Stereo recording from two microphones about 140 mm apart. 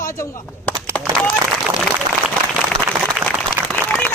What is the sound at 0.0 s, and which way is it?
Speech, 20° left (ahead or behind).